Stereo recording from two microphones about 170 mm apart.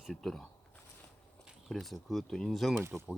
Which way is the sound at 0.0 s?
Centre (ahead or behind).